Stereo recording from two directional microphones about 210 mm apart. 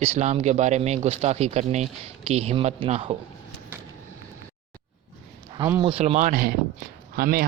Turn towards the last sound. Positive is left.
turn(degrees=-45)  # may be behind; listen again after turning